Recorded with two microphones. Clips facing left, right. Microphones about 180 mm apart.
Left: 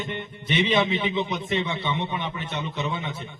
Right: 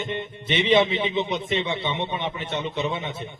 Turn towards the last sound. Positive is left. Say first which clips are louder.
# right 2 dB
turn(degrees=-25)  # may be behind; listen again after turning